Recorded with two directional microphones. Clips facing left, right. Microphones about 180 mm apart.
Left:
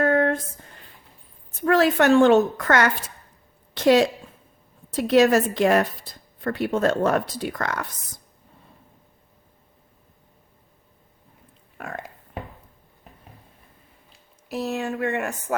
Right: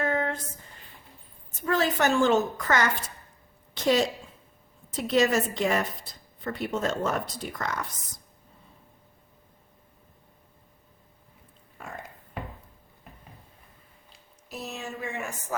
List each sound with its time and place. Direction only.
0.0 s a sound: 55° left (ahead or behind)
1.6 s speech: 60° left (ahead or behind)
14.5 s speech: 60° left (ahead or behind)